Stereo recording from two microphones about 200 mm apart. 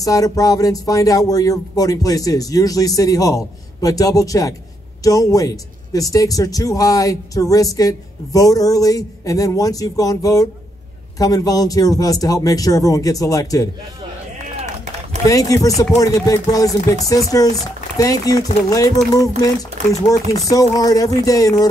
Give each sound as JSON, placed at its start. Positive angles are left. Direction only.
{"t": 0.0, "sound": "speech", "side_deg": 15}
{"t": 15.2, "sound": "speech", "side_deg": 15}